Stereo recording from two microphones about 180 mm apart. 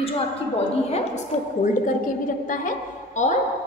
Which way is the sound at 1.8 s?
50° left (ahead or behind).